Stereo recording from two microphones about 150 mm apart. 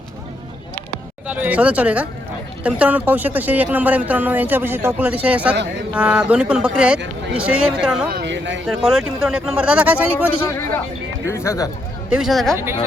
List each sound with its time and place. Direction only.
1.3 s speech: 10° right (ahead or behind)
11.3 s speech: 20° left (ahead or behind)
12.1 s speech: centre (ahead or behind)